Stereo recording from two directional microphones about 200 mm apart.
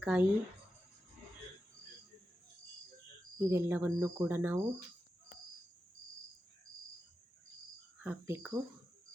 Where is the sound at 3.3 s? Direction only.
15° right (ahead or behind).